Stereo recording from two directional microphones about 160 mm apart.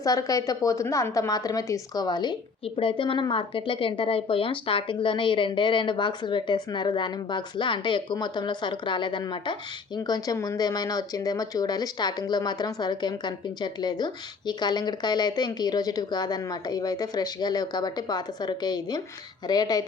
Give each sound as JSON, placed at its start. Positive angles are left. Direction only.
{"t": 0.0, "sound": "speech", "side_deg": 20}